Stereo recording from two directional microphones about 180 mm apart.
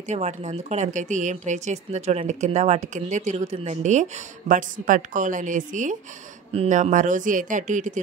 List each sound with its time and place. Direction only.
0.1 s speech: 40° right (ahead or behind)